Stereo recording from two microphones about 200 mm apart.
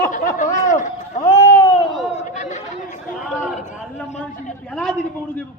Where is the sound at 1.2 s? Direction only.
15° left (ahead or behind).